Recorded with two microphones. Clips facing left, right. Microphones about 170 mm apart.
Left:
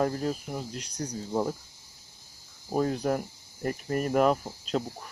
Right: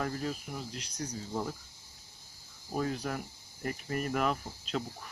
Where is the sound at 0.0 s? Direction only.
40° left (ahead or behind).